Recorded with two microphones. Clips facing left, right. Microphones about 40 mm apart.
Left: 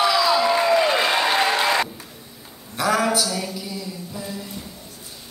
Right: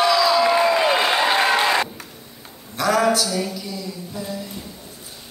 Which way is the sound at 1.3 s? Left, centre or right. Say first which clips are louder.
Right 2 dB; centre.